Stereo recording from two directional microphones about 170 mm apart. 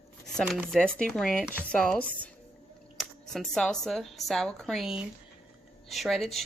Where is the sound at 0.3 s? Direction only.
Centre (ahead or behind).